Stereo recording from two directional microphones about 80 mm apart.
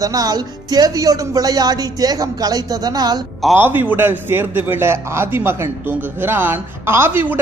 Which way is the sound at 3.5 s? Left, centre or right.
Right.